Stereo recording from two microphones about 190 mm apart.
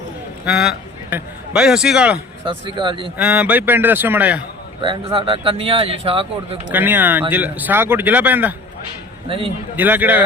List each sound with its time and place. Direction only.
0.4 s a man's voice: 5° right (ahead or behind)
2.5 s speech: 25° right (ahead or behind)
3.2 s speech: 5° right (ahead or behind)
4.8 s speech: 30° right (ahead or behind)
6.7 s speech: 10° right (ahead or behind)
9.3 s speech: 30° right (ahead or behind)
9.7 s speech: 10° right (ahead or behind)